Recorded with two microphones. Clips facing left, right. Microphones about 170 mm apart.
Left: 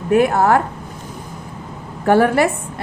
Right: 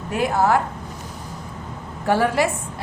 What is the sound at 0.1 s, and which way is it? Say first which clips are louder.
Speech: left 5 dB; 60° left (ahead or behind).